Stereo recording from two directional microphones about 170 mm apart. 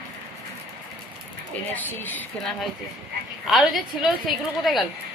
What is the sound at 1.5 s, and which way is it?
A woman's voice, 10° left (ahead or behind).